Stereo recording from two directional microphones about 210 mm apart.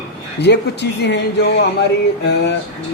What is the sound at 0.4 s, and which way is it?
Speech, 55° left (ahead or behind).